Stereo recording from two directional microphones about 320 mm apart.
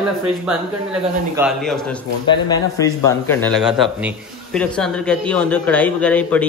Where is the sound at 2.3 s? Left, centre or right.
Centre.